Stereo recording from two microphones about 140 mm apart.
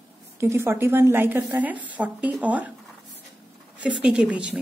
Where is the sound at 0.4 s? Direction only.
20° right (ahead or behind).